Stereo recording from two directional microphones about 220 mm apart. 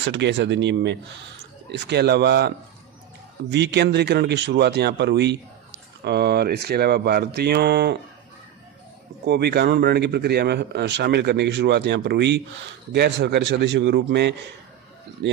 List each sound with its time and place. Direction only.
0.0 s speech: 55° right (ahead or behind)
9.2 s speech: 50° right (ahead or behind)